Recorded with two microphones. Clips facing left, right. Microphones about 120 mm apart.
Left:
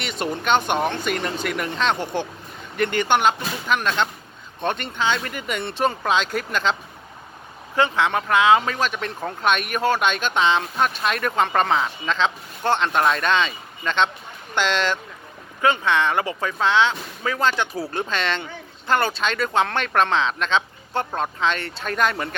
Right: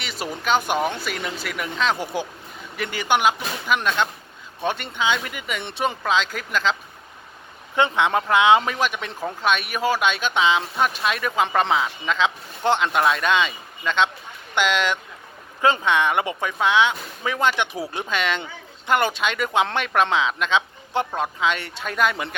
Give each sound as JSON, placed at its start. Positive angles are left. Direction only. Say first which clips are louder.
{"t": 0.0, "sound": "speech", "louder": "left 3 dB", "side_deg": -5}
{"t": 7.8, "sound": "speech", "louder": "even", "side_deg": -20}